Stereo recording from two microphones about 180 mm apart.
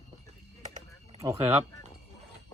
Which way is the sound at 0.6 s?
40° right (ahead or behind).